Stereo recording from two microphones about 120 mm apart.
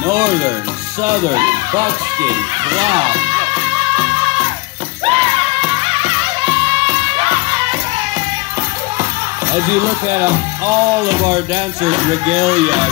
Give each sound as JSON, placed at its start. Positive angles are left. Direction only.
{"t": 0.0, "sound": "speech", "side_deg": -30}
{"t": 1.0, "sound": "music", "side_deg": -30}
{"t": 9.5, "sound": "speech", "side_deg": -20}
{"t": 11.0, "sound": "a sound", "side_deg": -35}
{"t": 11.8, "sound": "speech", "side_deg": -45}